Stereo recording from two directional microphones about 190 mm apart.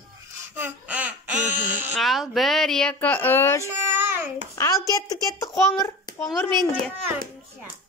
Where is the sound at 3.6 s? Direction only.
10° right (ahead or behind).